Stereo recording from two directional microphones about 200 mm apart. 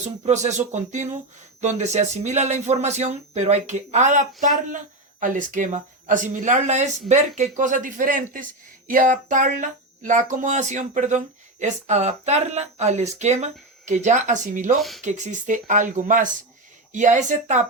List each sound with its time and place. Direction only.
0.3 s speech: 35° right (ahead or behind)
14.8 s speech: centre (ahead or behind)
15.0 s speech: 35° right (ahead or behind)